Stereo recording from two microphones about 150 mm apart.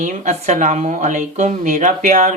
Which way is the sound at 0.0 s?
55° right (ahead or behind).